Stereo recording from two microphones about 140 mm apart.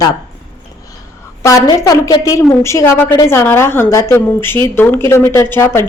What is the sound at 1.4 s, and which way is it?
A woman's voice, 25° left (ahead or behind).